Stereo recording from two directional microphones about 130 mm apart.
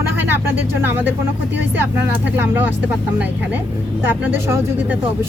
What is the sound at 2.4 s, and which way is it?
Speech, 15° right (ahead or behind).